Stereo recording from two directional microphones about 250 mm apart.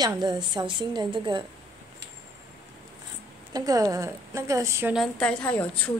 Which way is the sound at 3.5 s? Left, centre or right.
Centre.